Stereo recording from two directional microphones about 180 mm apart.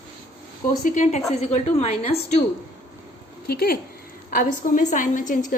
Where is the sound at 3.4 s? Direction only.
60° left (ahead or behind).